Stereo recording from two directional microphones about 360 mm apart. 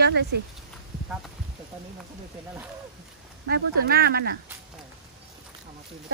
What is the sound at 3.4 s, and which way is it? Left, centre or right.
Speech, right.